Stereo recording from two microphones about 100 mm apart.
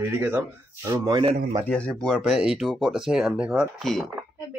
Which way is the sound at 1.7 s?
10° left (ahead or behind).